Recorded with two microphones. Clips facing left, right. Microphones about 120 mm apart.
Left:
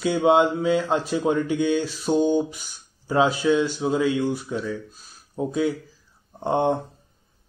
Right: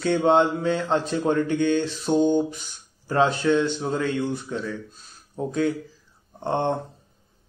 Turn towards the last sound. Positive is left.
turn(degrees=10)  # may be behind; listen again after turning